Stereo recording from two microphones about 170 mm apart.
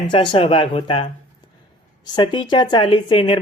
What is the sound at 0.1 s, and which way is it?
Speech, 30° left (ahead or behind).